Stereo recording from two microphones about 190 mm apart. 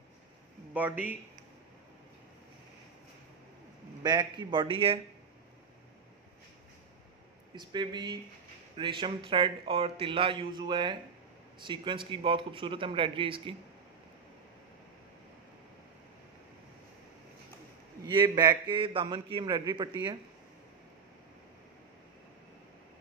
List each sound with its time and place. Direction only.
0.7 s speech: 10° right (ahead or behind)
4.0 s a man's voice: 20° right (ahead or behind)
7.5 s a man's voice: 25° right (ahead or behind)
18.0 s a man's voice: 20° right (ahead or behind)